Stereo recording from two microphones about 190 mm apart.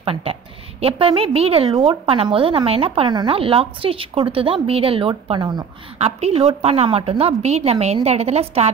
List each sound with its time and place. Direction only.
0.0 s a woman's voice: 30° right (ahead or behind)
5.9 s a woman's voice: 35° right (ahead or behind)